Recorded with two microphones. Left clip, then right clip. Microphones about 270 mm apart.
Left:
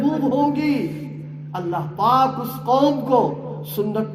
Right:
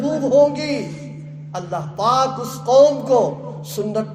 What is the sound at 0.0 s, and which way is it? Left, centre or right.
Speech, right.